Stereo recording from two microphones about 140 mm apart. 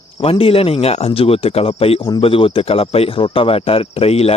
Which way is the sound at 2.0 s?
25° left (ahead or behind).